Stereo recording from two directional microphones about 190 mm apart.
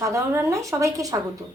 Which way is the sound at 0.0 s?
15° right (ahead or behind).